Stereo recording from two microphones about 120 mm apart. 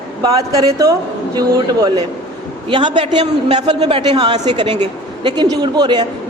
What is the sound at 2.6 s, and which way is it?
A man's voice, 45° right (ahead or behind).